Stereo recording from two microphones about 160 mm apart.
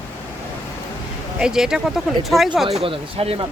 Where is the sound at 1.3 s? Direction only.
5° right (ahead or behind).